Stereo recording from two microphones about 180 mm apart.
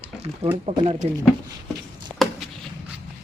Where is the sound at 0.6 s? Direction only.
35° right (ahead or behind).